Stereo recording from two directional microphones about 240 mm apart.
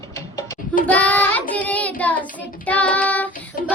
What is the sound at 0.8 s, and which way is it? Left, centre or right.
Child singing, centre.